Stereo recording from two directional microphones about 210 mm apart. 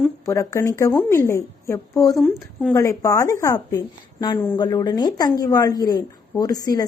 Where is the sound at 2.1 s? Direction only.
Centre (ahead or behind).